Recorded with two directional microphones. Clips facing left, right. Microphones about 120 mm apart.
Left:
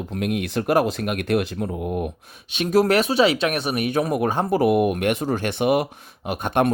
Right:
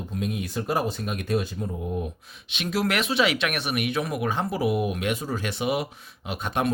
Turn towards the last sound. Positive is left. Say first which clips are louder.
# left 6 dB
turn(degrees=55)  # may be behind; listen again after turning